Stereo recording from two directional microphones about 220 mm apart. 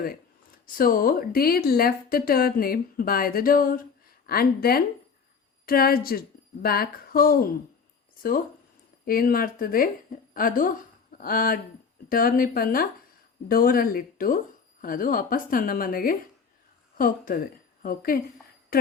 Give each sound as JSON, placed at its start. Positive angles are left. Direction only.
{"t": 0.6, "sound": "speech", "side_deg": 40}
{"t": 9.0, "sound": "a woman's voice", "side_deg": 40}
{"t": 18.7, "sound": "jingle bell", "side_deg": 40}